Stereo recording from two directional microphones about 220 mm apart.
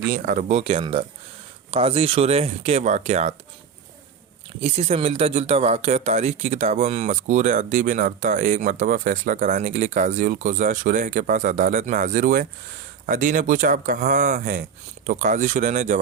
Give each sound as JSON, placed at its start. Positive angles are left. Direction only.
{"t": 0.1, "sound": "speech", "side_deg": -40}
{"t": 4.6, "sound": "speech", "side_deg": -30}